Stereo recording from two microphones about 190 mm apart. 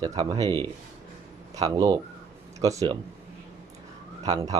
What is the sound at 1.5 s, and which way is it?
Speech, 20° right (ahead or behind).